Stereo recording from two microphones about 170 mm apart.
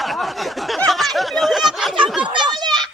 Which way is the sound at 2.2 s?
25° right (ahead or behind).